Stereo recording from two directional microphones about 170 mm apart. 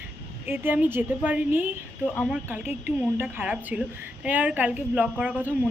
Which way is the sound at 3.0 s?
10° right (ahead or behind).